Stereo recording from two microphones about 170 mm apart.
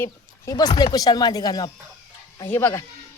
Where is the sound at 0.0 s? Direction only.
20° left (ahead or behind).